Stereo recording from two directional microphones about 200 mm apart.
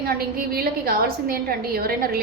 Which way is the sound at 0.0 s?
50° right (ahead or behind).